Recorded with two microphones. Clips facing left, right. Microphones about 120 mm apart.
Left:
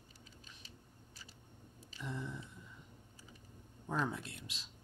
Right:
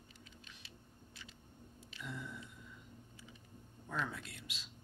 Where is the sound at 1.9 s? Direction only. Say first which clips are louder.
Left 3 dB; 30° left (ahead or behind).